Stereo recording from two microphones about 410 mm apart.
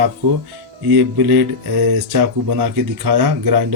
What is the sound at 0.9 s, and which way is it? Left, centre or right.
Speech, right.